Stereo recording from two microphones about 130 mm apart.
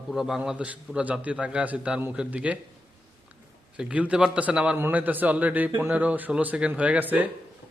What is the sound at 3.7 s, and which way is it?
A man's voice, 10° right (ahead or behind).